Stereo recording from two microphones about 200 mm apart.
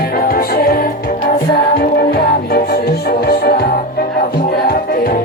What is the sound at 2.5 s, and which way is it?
Music, 50° left (ahead or behind).